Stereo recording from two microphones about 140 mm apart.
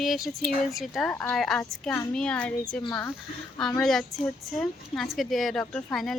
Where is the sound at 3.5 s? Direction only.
5° left (ahead or behind).